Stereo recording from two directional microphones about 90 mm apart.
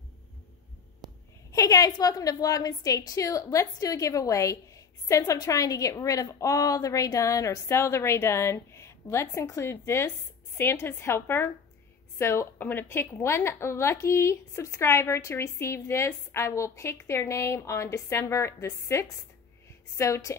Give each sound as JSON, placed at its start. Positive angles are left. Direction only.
{"t": 1.5, "sound": "a woman's voice", "side_deg": 40}